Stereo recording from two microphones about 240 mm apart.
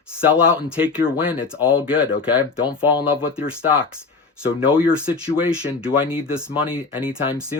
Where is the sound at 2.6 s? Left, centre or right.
Centre.